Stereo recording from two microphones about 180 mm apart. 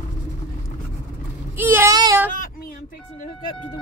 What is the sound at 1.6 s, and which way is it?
Child singing, 15° right (ahead or behind).